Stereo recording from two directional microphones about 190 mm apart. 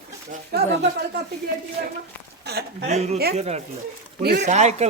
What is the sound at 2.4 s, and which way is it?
Speech, 60° right (ahead or behind).